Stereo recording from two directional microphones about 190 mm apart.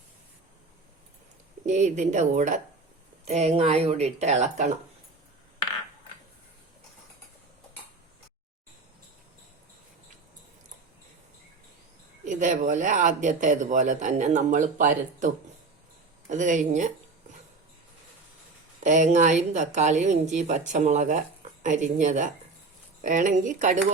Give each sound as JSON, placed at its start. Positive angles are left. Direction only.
{"t": 1.6, "sound": "speech", "side_deg": -40}
{"t": 12.2, "sound": "speech", "side_deg": -40}
{"t": 16.3, "sound": "speech", "side_deg": -40}
{"t": 18.8, "sound": "speech", "side_deg": -40}